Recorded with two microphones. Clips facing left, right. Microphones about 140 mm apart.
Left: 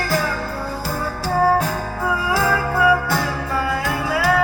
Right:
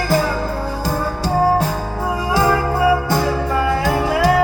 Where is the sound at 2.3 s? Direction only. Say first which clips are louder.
Right 5 dB; 25° right (ahead or behind).